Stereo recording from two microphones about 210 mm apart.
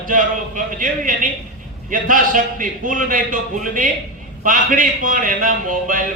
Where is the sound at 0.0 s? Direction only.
40° right (ahead or behind).